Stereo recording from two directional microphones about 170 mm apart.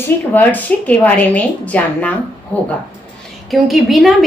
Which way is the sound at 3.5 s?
Centre (ahead or behind).